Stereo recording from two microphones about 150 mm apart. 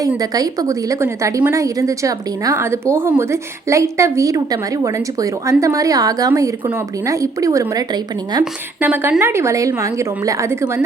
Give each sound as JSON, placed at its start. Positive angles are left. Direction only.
{"t": 0.2, "sound": "a woman's voice", "side_deg": -25}
{"t": 8.8, "sound": "a woman's voice", "side_deg": -15}